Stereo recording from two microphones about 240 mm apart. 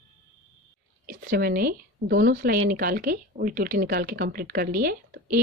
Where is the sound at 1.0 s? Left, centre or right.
Right.